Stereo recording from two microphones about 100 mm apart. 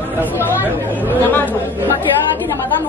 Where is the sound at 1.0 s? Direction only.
20° left (ahead or behind).